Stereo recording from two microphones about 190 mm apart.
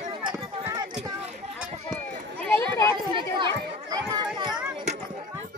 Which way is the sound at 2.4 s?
10° left (ahead or behind).